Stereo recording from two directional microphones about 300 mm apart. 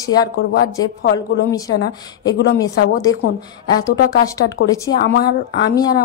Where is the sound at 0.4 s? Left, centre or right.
Left.